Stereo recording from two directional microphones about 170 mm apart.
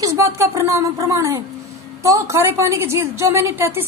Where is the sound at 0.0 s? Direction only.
15° right (ahead or behind).